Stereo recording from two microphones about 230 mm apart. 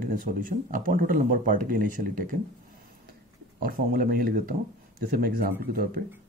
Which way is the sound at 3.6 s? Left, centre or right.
Right.